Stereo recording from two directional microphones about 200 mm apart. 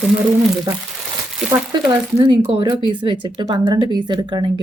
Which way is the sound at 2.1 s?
20° right (ahead or behind).